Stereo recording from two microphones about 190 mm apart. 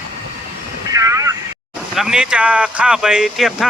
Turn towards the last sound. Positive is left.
turn(degrees=0)  # may be behind; listen again after turning